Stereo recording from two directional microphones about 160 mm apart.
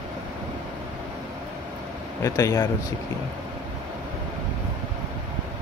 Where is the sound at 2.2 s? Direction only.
20° left (ahead or behind).